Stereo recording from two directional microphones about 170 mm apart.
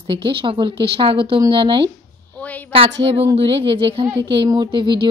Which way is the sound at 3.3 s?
30° right (ahead or behind).